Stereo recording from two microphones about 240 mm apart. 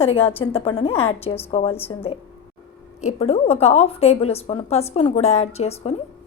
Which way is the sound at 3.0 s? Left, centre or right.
Left.